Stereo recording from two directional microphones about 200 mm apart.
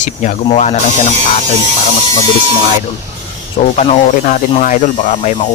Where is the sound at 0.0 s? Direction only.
35° left (ahead or behind).